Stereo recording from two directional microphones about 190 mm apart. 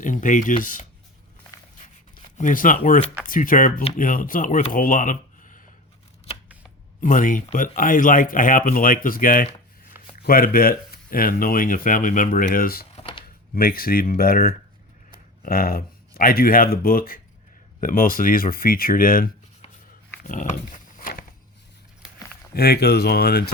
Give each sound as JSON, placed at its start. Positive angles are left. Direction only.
{"t": 0.0, "sound": "speech", "side_deg": 45}
{"t": 2.4, "sound": "speech", "side_deg": 45}
{"t": 7.0, "sound": "speech", "side_deg": 45}
{"t": 13.0, "sound": "a sound", "side_deg": 30}
{"t": 13.5, "sound": "speech", "side_deg": 50}
{"t": 20.2, "sound": "pig", "side_deg": 40}
{"t": 22.5, "sound": "speech", "side_deg": 55}